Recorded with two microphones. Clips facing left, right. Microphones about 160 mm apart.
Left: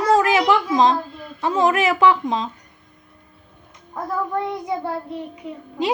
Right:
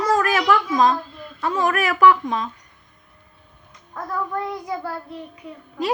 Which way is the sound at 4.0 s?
25° left (ahead or behind).